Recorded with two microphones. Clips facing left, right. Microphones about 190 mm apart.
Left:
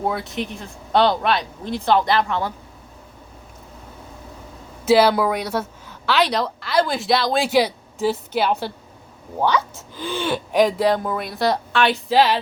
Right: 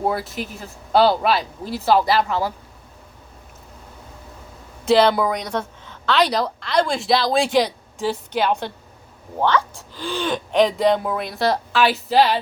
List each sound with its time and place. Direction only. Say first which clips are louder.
0.0 s a woman's voice: right 1 dB; centre (ahead or behind)
4.9 s a woman's voice: even; 5° left (ahead or behind)